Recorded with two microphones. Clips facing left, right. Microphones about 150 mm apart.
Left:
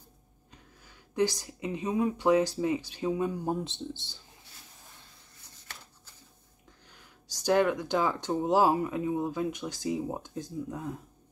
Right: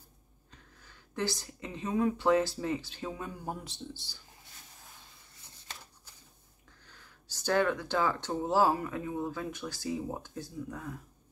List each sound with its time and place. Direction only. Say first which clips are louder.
0.5 s speech: left 2 dB; 15° left (ahead or behind)
6.9 s speech: left 2 dB; 15° left (ahead or behind)